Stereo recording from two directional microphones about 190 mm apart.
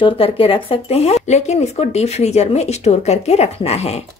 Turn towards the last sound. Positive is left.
turn(degrees=35)  # may be behind; listen again after turning